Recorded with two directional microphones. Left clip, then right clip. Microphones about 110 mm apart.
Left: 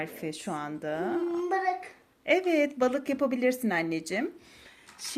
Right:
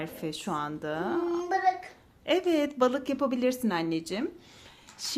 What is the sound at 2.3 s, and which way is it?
A woman's voice, 15° right (ahead or behind).